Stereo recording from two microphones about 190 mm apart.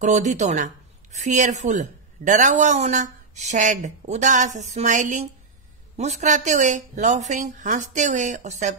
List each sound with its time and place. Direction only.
0.0 s speech: 40° right (ahead or behind)